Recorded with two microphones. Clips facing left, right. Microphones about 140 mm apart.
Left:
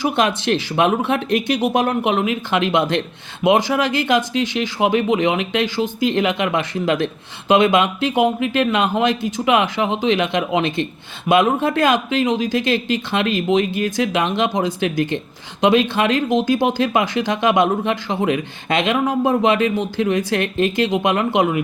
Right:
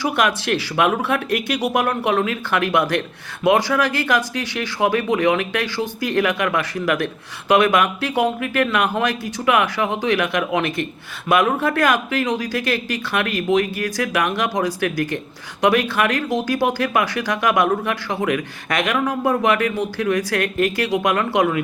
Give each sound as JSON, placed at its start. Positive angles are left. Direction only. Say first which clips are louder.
{"t": 0.0, "sound": "speech", "louder": "left 2 dB", "side_deg": 25}